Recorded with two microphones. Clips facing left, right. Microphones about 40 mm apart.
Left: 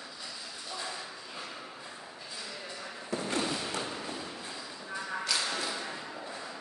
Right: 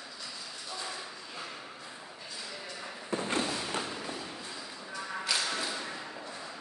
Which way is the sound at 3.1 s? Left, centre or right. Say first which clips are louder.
Right 1 dB; right.